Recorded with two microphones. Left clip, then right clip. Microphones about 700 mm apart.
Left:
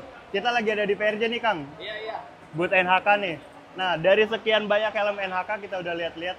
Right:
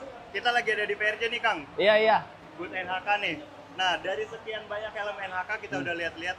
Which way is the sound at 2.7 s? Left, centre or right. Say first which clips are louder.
Left 9 dB; left.